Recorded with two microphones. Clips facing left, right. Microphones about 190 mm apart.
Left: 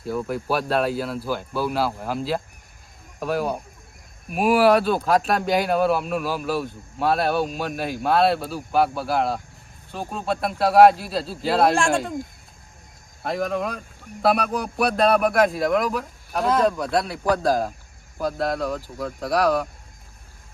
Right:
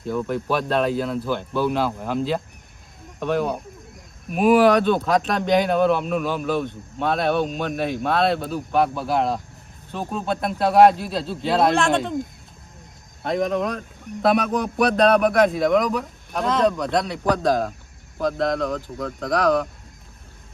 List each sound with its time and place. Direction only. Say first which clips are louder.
0.0 s speech: right 2 dB; 5° left (ahead or behind)
13.2 s speech: right 3 dB; centre (ahead or behind)